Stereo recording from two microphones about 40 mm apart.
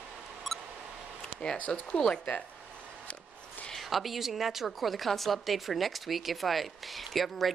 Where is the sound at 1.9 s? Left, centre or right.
Centre.